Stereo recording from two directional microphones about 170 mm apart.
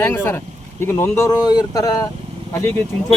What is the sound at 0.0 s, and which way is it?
Speech, 15° left (ahead or behind).